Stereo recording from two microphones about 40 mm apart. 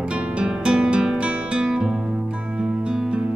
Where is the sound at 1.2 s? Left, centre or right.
Right.